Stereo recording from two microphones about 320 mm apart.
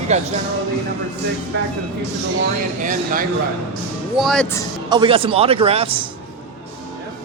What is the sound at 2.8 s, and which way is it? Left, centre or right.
Speech, right.